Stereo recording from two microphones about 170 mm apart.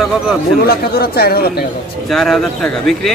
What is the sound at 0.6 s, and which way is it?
Speech, 65° left (ahead or behind).